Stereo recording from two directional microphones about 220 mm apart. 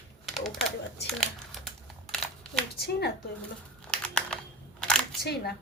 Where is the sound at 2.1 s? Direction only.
Centre (ahead or behind).